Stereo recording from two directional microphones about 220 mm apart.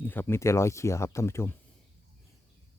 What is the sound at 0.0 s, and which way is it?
Speech, 10° left (ahead or behind).